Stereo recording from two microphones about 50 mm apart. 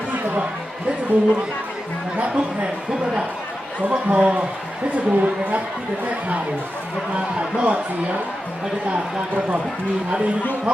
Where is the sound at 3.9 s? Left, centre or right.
Right.